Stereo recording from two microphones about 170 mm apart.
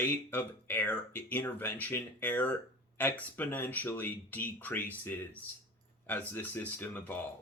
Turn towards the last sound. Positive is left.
turn(degrees=10)  # may be behind; listen again after turning